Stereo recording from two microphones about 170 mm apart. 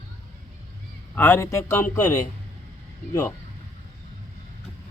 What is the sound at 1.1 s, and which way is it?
Speech, 10° left (ahead or behind).